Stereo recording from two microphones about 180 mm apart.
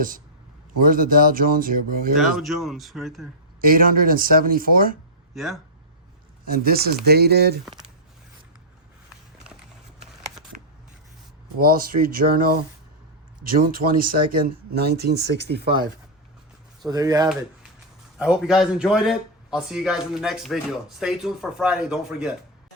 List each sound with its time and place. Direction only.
0.8 s speech: 50° right (ahead or behind)
2.1 s speech: centre (ahead or behind)
3.6 s speech: 50° right (ahead or behind)
5.3 s speech: centre (ahead or behind)
6.4 s speech: 55° right (ahead or behind)
11.6 s speech: 50° right (ahead or behind); by 15.6 s 70° right (ahead or behind)
16.8 s speech: 20° right (ahead or behind)
18.2 s speech: 5° right (ahead or behind)